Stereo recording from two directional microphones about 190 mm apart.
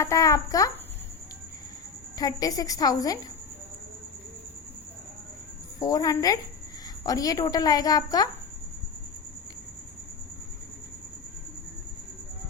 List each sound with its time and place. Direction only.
0.0 s a child's voice: 15° left (ahead or behind)
2.1 s a woman's voice: 20° left (ahead or behind)
5.8 s a woman's voice: 20° left (ahead or behind)